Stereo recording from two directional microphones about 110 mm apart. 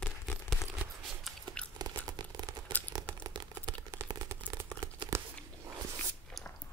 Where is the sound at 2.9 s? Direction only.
30° right (ahead or behind).